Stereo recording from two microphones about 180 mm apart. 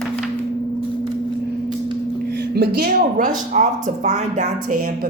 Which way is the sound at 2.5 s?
60° right (ahead or behind).